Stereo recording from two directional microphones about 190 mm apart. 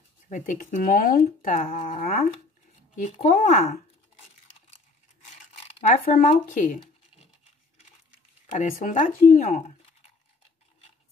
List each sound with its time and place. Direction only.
0.3 s speech: 40° left (ahead or behind)
5.9 s speech: 40° left (ahead or behind)
8.5 s speech: 40° left (ahead or behind)